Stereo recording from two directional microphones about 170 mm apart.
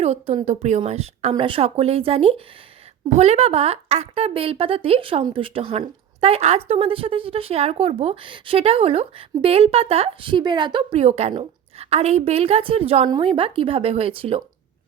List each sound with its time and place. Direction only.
0.0 s speech: 35° right (ahead or behind)